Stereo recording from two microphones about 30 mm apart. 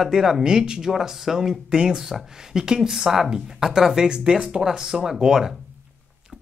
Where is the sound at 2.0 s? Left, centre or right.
Centre.